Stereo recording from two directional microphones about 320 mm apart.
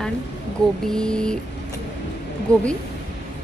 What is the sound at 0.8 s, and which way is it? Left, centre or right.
Speech, centre.